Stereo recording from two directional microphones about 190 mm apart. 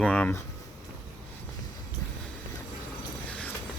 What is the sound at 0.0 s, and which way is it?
Speech, 5° left (ahead or behind).